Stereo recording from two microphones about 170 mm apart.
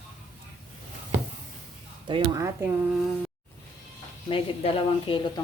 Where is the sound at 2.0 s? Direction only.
30° right (ahead or behind).